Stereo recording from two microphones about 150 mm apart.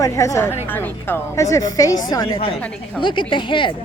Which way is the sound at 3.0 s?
30° left (ahead or behind).